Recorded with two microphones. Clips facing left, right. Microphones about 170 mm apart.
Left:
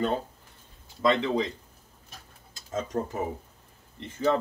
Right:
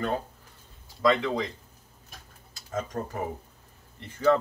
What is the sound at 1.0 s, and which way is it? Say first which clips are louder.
Speech: even; 25° left (ahead or behind).